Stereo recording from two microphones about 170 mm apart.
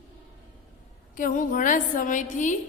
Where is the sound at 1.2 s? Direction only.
50° left (ahead or behind).